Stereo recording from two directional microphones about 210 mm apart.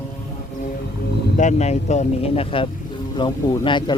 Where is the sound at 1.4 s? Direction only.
35° left (ahead or behind).